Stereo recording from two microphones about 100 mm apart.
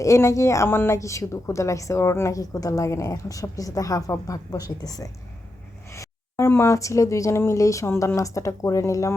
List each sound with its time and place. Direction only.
0.0 s a woman's voice: 30° left (ahead or behind)
5.9 s a woman's voice: 30° left (ahead or behind)